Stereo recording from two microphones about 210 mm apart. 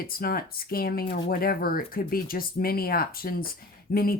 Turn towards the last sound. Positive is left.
turn(degrees=45)  # may be behind; listen again after turning